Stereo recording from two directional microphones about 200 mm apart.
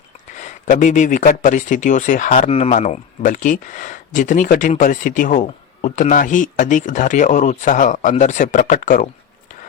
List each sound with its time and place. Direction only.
0.3 s speech: 40° left (ahead or behind)